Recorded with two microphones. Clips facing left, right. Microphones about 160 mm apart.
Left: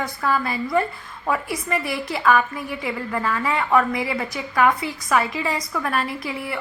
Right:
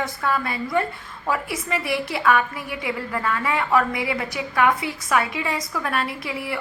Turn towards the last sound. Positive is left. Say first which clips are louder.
# even
turn(degrees=0)  # may be behind; listen again after turning